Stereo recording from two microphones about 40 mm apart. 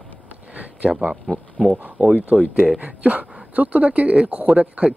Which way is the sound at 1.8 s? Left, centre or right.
Right.